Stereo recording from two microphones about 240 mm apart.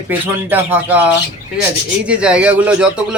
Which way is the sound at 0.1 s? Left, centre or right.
Centre.